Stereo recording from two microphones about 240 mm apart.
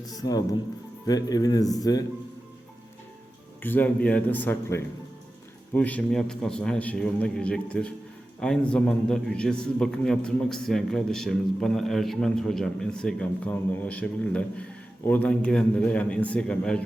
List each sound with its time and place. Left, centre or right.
0.0 s speech: centre
3.6 s a man's voice: centre